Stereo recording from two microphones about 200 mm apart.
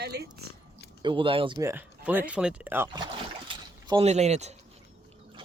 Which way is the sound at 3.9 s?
30° right (ahead or behind).